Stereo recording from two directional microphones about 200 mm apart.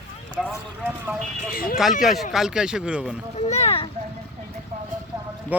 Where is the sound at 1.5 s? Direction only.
45° left (ahead or behind).